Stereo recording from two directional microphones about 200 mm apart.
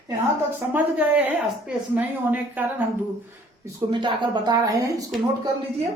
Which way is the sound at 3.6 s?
20° right (ahead or behind).